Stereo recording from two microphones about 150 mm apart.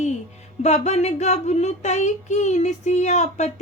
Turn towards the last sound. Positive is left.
turn(degrees=50)  # may be behind; listen again after turning